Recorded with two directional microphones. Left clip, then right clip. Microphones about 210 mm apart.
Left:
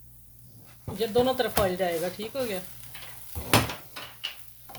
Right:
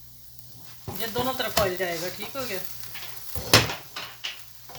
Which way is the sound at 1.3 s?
55° left (ahead or behind).